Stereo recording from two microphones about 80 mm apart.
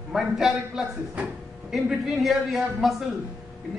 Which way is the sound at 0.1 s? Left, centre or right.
Centre.